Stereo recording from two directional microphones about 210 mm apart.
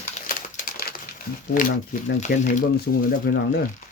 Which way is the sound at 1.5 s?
40° left (ahead or behind).